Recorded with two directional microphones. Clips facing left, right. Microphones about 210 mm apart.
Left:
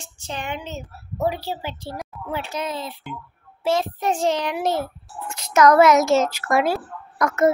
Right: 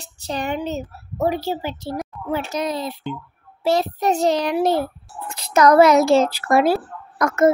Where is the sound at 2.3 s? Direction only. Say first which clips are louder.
Right 4 dB; 40° right (ahead or behind).